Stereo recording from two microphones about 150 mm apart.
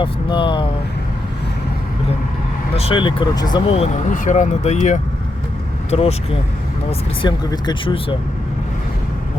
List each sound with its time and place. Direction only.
0.0 s speech: 35° left (ahead or behind)
2.7 s speech: 40° left (ahead or behind)
3.7 s speech: 45° left (ahead or behind)
7.2 s speech: 30° left (ahead or behind)